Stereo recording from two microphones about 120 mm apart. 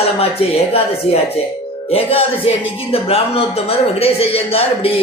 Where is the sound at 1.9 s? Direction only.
55° left (ahead or behind).